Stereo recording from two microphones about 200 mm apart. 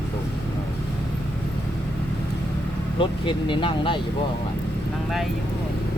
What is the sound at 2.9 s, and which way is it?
Speech, 25° left (ahead or behind).